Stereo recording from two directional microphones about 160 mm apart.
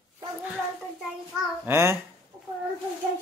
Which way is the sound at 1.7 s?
15° right (ahead or behind).